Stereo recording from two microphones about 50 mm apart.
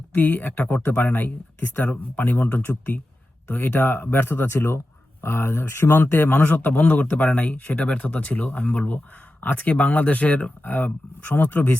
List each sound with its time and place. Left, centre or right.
0.2 s a man's voice: left